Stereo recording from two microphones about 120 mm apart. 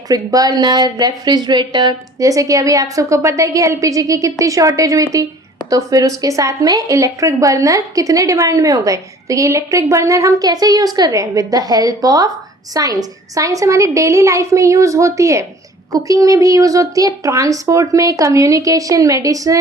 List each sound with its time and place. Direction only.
0.1 s a woman's voice: 30° right (ahead or behind)